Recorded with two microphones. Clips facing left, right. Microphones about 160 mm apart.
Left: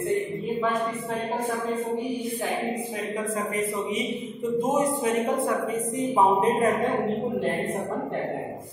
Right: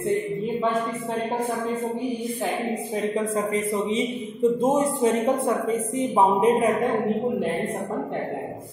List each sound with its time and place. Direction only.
4.6 s a woman's voice: 30° right (ahead or behind)